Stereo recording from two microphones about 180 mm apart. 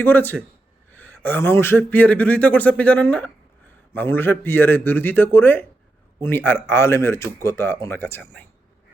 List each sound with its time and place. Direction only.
0.0 s speech: 10° left (ahead or behind)